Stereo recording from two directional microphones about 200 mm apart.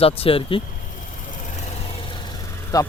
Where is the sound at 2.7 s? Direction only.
15° left (ahead or behind).